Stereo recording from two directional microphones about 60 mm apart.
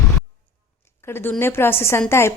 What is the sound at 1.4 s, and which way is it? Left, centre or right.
Speech, left.